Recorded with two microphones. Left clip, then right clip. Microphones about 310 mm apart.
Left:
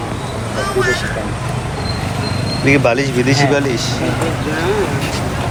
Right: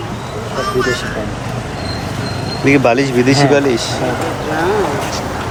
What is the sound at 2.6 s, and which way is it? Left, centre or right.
Speech, centre.